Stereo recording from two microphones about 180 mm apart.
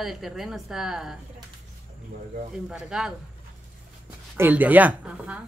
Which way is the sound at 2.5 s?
5° right (ahead or behind).